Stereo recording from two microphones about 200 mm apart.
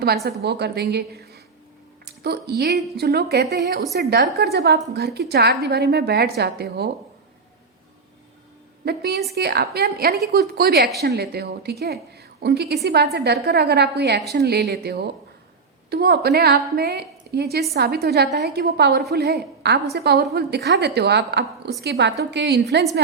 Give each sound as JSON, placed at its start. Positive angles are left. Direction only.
{"t": 0.3, "sound": "a woman's voice", "side_deg": -55}
{"t": 8.8, "sound": "a woman's voice", "side_deg": -55}